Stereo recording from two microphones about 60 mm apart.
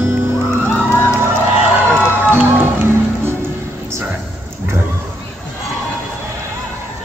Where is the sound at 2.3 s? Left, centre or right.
Right.